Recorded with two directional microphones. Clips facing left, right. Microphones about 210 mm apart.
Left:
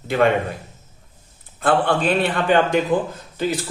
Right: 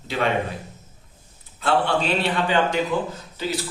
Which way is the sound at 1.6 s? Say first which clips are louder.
Left 3 dB; 50° left (ahead or behind).